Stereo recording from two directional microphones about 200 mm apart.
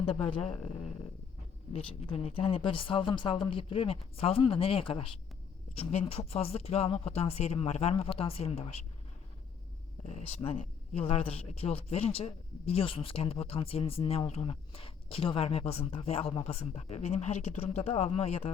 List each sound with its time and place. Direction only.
0.0 s speech: 25° left (ahead or behind)
10.1 s speech: 35° left (ahead or behind)